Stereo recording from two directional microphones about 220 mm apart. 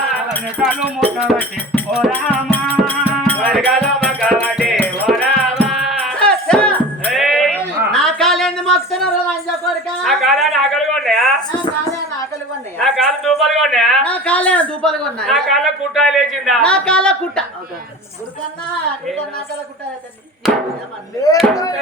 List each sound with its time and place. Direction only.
0.6 s speech: centre (ahead or behind)
3.2 s music: 5° left (ahead or behind)
7.9 s a sound: centre (ahead or behind)
12.8 s a woman's voice: centre (ahead or behind)
21.5 s speech: 15° left (ahead or behind)